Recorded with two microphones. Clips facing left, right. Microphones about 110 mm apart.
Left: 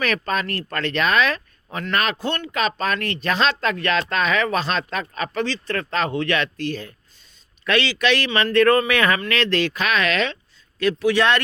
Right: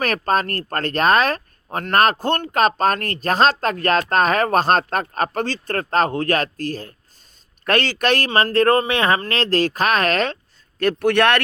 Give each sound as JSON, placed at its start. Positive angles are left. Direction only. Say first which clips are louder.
{"t": 0.0, "sound": "a man's voice", "louder": "right 3 dB", "side_deg": -45}